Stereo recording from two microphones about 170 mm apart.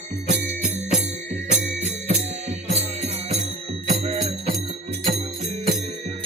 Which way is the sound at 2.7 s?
40° right (ahead or behind).